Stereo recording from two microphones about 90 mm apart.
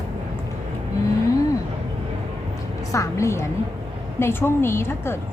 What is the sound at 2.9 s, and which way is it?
A woman's voice, 35° left (ahead or behind).